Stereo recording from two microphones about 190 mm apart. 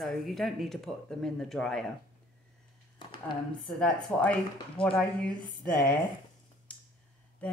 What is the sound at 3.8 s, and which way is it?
Speech, 5° left (ahead or behind).